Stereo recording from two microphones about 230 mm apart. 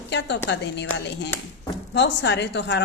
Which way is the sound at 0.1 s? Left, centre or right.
Left.